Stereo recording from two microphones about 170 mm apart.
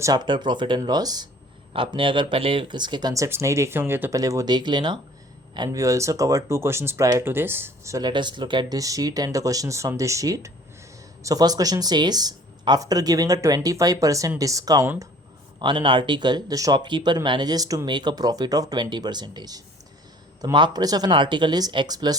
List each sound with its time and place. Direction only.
0.0 s speech: 25° right (ahead or behind)